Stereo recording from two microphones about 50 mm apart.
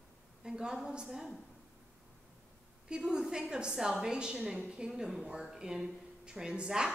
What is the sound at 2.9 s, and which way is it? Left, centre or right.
A woman's voice, centre.